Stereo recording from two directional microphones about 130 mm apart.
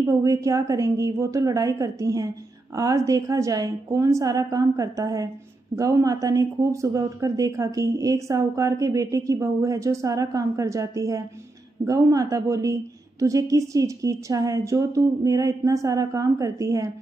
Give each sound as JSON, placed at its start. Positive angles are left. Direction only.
{"t": 0.0, "sound": "speech", "side_deg": -25}